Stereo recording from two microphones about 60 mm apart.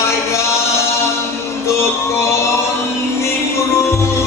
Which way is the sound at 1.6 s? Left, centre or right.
Left.